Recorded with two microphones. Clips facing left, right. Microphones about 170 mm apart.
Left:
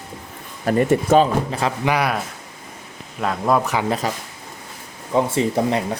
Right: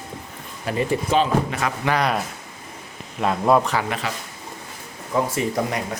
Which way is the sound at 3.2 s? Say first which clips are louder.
Right 1 dB; 5° right (ahead or behind).